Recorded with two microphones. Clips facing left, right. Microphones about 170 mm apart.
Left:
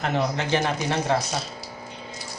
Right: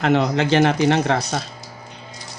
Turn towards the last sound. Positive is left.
turn(degrees=-85)